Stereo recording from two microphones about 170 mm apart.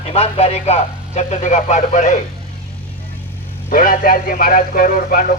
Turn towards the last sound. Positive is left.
turn(degrees=55)  # may be behind; listen again after turning